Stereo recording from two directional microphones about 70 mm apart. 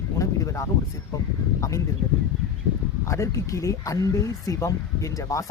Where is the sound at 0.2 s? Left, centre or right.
Left.